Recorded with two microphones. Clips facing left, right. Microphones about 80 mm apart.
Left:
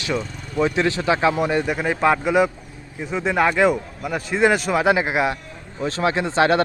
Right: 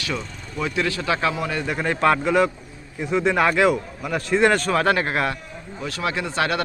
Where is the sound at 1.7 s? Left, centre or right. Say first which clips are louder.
Left 1 dB; centre.